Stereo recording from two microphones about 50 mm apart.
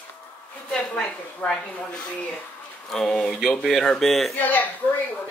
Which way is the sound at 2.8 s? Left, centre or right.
Centre.